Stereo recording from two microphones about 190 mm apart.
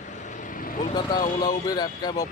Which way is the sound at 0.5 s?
45° left (ahead or behind).